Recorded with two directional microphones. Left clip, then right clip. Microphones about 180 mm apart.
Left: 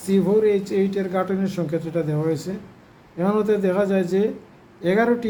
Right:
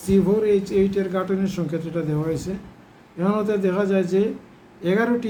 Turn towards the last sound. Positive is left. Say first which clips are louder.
# left 2 dB
turn(degrees=25)  # may be behind; listen again after turning